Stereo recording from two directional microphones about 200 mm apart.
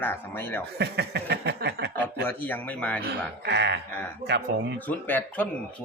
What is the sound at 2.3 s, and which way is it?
Speech, 10° left (ahead or behind).